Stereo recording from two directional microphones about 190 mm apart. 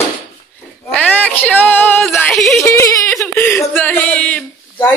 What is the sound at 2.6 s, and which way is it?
A man's voice, 15° left (ahead or behind).